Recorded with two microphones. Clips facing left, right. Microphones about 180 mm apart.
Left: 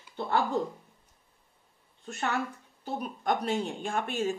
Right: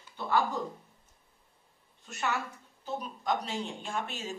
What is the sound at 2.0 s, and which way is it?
A woman's voice, 55° left (ahead or behind).